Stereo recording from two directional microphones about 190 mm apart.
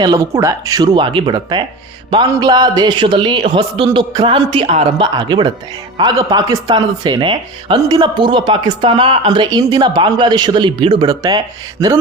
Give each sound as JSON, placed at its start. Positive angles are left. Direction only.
{"t": 0.0, "sound": "speech", "side_deg": -20}